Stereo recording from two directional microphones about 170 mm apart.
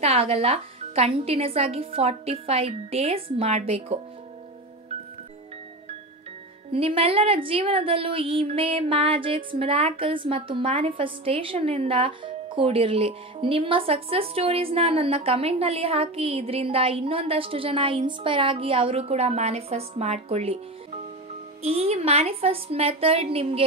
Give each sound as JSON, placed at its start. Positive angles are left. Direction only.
{"t": 0.0, "sound": "speech", "side_deg": -35}
{"t": 6.7, "sound": "speech", "side_deg": -35}
{"t": 21.6, "sound": "speech", "side_deg": -40}